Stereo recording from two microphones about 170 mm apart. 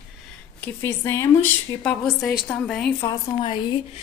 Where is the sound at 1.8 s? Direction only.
Centre (ahead or behind).